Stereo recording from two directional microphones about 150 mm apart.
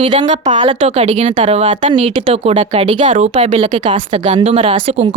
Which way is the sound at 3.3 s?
40° right (ahead or behind).